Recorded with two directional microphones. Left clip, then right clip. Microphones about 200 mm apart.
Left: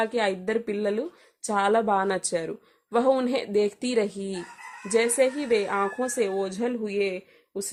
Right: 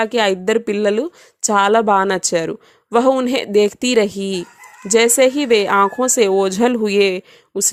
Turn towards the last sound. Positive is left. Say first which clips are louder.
# right 11 dB
turn(degrees=-45)  # may be behind; listen again after turning